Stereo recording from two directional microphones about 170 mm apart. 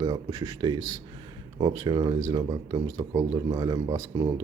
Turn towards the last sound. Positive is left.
turn(degrees=-25)  # may be behind; listen again after turning